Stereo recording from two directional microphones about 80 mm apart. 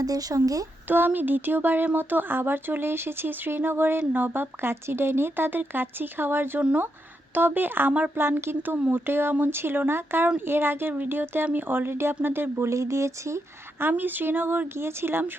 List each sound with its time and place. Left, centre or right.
0.0 s speech: right
0.9 s speech: right